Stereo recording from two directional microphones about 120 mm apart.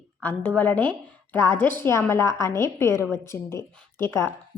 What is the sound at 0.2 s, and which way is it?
A woman's voice, 15° left (ahead or behind).